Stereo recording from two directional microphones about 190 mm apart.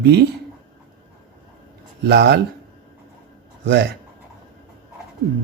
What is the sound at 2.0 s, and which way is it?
Speech, 60° right (ahead or behind).